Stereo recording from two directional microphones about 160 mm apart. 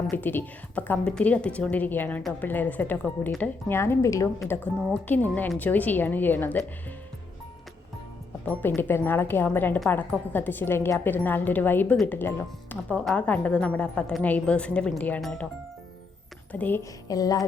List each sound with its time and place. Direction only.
0.1 s a woman's voice: 10° left (ahead or behind)
8.4 s a woman's voice: 10° left (ahead or behind)
16.5 s a woman's voice: 10° left (ahead or behind)
17.1 s music: 20° left (ahead or behind)